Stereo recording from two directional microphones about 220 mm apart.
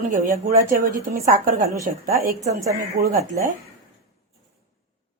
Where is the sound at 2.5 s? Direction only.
15° right (ahead or behind).